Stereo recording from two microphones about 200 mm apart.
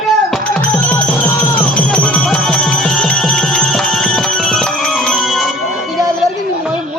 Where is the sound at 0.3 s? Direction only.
5° left (ahead or behind).